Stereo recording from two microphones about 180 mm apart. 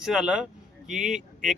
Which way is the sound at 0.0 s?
5° right (ahead or behind).